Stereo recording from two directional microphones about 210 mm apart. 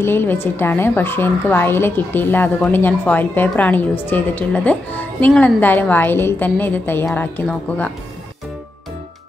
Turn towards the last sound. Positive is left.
turn(degrees=5)  # may be behind; listen again after turning